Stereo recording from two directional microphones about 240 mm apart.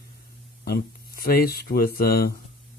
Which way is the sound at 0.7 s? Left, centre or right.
Left.